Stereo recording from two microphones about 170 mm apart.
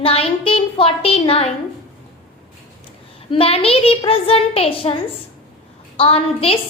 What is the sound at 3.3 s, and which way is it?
A woman's voice, 35° left (ahead or behind).